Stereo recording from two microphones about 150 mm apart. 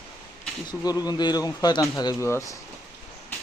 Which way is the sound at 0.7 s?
25° left (ahead or behind).